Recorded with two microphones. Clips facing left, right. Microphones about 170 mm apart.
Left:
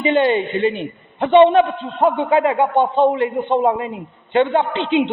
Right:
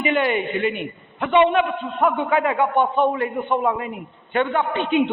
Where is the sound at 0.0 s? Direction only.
30° left (ahead or behind).